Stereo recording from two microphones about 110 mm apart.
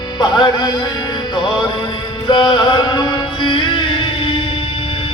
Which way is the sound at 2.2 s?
45° left (ahead or behind).